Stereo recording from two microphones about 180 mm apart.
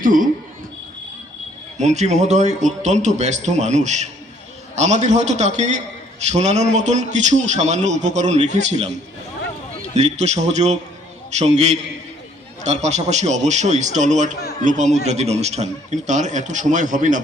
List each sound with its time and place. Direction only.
0.0 s speech: 50° right (ahead or behind)
1.8 s a man's voice: 40° right (ahead or behind)
9.9 s a man's voice: 40° right (ahead or behind)